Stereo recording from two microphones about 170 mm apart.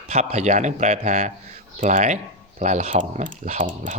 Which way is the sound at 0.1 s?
40° right (ahead or behind).